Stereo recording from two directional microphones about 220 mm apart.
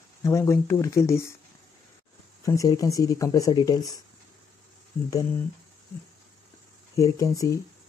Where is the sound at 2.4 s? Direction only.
15° left (ahead or behind).